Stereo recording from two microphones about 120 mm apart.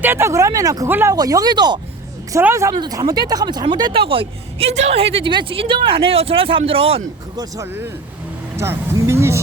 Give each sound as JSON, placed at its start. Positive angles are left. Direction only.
{"t": 0.0, "sound": "speech", "side_deg": -20}
{"t": 0.9, "sound": "speech", "side_deg": -15}
{"t": 1.1, "sound": "speech", "side_deg": -30}
{"t": 2.4, "sound": "speech", "side_deg": -20}
{"t": 2.7, "sound": "speech", "side_deg": -35}
{"t": 4.7, "sound": "speech", "side_deg": -75}
{"t": 4.9, "sound": "speech", "side_deg": -55}
{"t": 7.3, "sound": "speech", "side_deg": -30}